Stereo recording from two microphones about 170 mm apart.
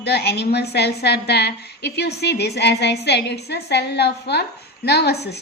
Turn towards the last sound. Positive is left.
turn(degrees=75)  # may be behind; listen again after turning